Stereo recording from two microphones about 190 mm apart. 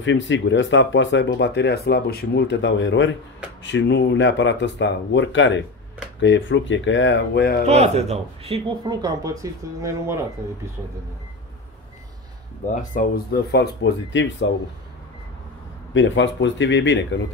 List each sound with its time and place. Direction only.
0.0 s speech: 75° left (ahead or behind); by 7.6 s 55° left (ahead or behind)
7.6 s speech: 35° right (ahead or behind); by 10.7 s 15° right (ahead or behind)
12.6 s speech: 45° left (ahead or behind); by 14.5 s 65° left (ahead or behind)
15.9 s speech: 80° left